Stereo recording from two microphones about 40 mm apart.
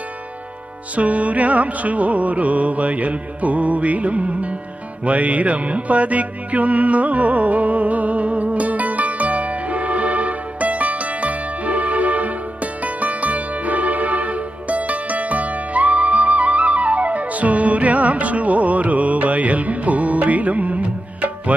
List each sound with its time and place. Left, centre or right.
0.9 s music: right